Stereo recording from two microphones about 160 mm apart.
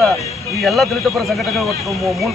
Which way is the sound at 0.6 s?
Centre (ahead or behind).